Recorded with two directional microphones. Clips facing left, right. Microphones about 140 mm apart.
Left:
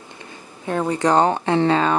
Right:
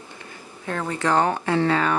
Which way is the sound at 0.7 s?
20° left (ahead or behind).